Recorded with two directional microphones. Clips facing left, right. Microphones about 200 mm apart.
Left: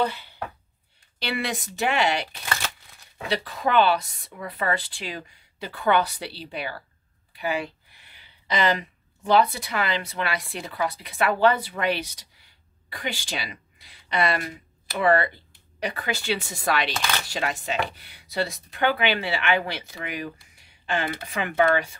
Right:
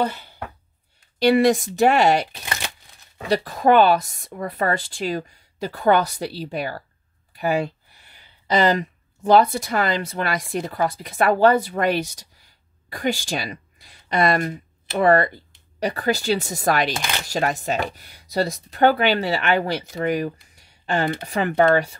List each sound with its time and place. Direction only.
0.0 s speech: 45° right (ahead or behind)
2.4 s a sound: 20° right (ahead or behind)
3.3 s speech: 45° right (ahead or behind)
16.9 s speech: 15° right (ahead or behind)
17.3 s speech: 45° right (ahead or behind)
20.5 s a sound: 40° right (ahead or behind)
21.3 s speech: 40° right (ahead or behind)